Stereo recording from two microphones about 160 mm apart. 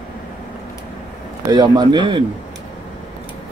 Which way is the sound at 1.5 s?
25° right (ahead or behind).